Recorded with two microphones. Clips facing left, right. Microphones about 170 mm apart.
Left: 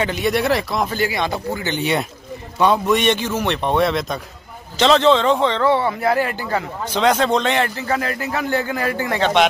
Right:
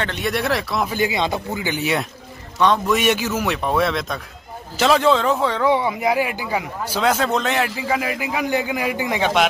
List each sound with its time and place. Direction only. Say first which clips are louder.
0.0 s speech: left 4 dB; 5° left (ahead or behind)
0.9 s a man's voice: even; 20° right (ahead or behind); by 2.0 s 5° right (ahead or behind)
2.6 s a man's voice: left 2 dB; 5° left (ahead or behind)
3.0 s a man's voice: left 1 dB; 5° right (ahead or behind)